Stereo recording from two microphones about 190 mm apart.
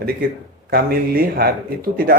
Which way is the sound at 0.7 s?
50° right (ahead or behind).